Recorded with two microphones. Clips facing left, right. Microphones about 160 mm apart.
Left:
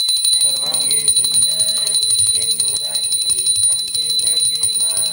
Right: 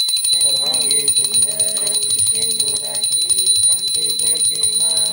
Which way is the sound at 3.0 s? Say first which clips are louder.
Right 3 dB; centre (ahead or behind).